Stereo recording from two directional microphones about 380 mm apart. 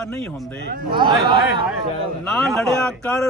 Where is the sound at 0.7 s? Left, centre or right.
Centre.